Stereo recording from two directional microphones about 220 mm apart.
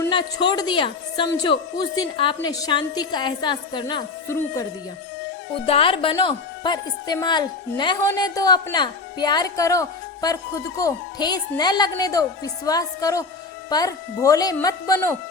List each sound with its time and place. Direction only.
0.1 s a woman's voice: 20° left (ahead or behind)
5.6 s a woman's voice: 25° left (ahead or behind)